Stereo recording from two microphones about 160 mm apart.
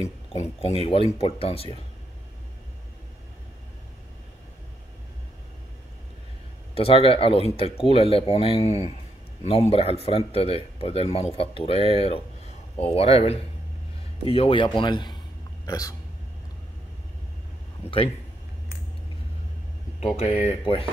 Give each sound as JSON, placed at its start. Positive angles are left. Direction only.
{"t": 0.0, "sound": "a man's voice", "side_deg": 40}
{"t": 6.7, "sound": "a man's voice", "side_deg": 35}
{"t": 17.8, "sound": "speech", "side_deg": 40}
{"t": 20.3, "sound": "a man's voice", "side_deg": 35}